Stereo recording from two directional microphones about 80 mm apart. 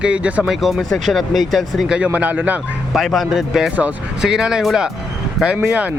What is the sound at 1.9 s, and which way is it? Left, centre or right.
Speech, centre.